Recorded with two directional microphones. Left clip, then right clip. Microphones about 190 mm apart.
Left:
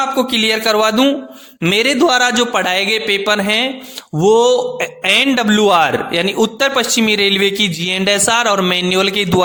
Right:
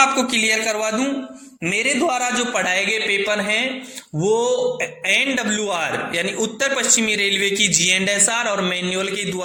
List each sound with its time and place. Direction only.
0.2 s a man's voice: 45° left (ahead or behind)